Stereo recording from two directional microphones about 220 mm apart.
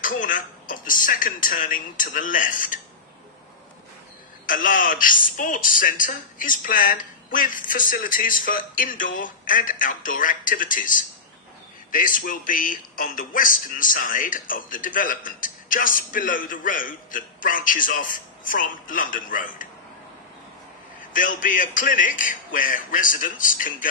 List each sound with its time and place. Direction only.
0.0 s speech: 35° left (ahead or behind)
4.5 s speech: 35° left (ahead or behind)
21.1 s speech: 35° left (ahead or behind)